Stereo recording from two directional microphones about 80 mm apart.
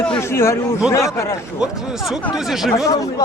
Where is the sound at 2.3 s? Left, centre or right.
Centre.